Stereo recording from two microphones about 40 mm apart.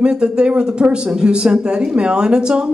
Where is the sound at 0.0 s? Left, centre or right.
Right.